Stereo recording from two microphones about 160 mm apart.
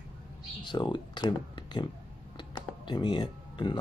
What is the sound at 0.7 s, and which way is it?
Speech, 30° left (ahead or behind).